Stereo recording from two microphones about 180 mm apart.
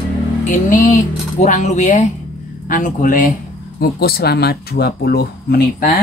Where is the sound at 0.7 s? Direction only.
45° left (ahead or behind).